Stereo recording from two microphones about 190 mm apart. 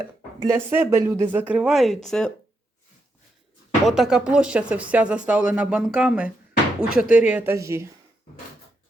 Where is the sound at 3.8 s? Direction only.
Centre (ahead or behind).